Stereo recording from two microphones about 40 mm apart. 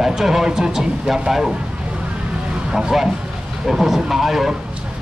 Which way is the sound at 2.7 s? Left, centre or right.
Centre.